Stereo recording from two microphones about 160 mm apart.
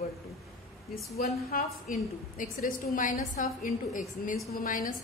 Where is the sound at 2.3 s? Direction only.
55° left (ahead or behind).